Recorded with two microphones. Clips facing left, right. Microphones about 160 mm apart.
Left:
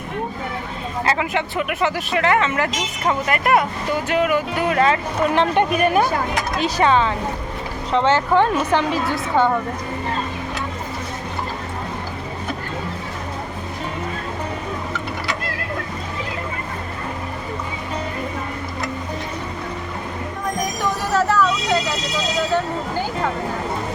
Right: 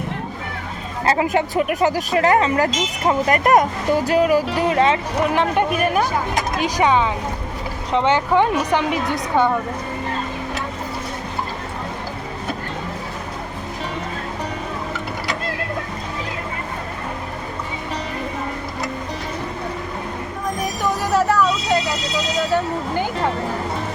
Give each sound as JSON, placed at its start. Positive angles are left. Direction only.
{"t": 1.0, "sound": "speech", "side_deg": -35}
{"t": 5.3, "sound": "a woman's voice", "side_deg": -5}
{"t": 21.2, "sound": "vehicle", "side_deg": -15}